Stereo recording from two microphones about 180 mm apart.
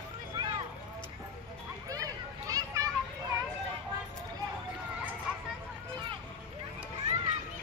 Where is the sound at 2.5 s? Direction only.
20° right (ahead or behind).